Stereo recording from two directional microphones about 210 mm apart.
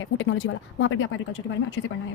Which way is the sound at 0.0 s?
65° left (ahead or behind).